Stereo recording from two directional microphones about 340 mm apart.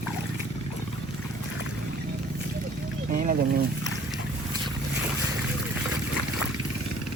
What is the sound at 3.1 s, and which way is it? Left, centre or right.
Speech, right.